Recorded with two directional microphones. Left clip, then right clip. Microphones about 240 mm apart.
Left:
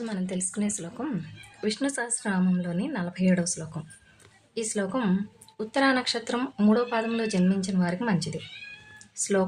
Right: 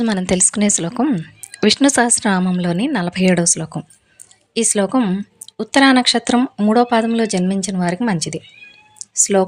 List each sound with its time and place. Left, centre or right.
0.0 s a woman's voice: right
9.0 s cat: right